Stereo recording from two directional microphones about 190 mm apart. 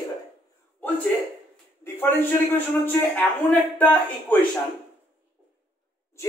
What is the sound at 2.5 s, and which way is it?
Speech, 10° left (ahead or behind).